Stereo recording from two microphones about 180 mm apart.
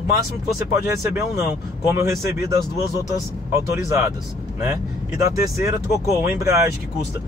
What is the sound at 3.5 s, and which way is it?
Speech, 15° right (ahead or behind).